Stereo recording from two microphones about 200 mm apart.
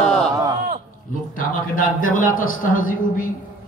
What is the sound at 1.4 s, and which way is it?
A man's voice, 40° left (ahead or behind).